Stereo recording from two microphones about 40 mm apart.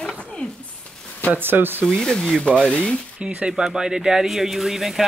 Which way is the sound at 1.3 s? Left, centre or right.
Right.